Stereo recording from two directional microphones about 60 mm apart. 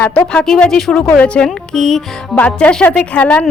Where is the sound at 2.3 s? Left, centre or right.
Left.